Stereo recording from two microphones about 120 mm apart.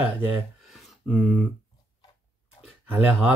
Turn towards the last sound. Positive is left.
turn(degrees=-15)  # may be behind; listen again after turning